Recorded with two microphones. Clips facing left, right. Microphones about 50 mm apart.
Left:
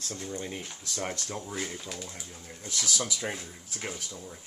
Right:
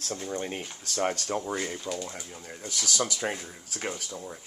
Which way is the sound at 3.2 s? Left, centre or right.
Centre.